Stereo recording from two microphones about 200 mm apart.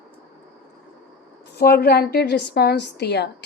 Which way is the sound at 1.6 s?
50° left (ahead or behind).